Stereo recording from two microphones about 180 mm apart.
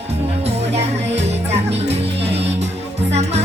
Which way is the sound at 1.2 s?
35° right (ahead or behind).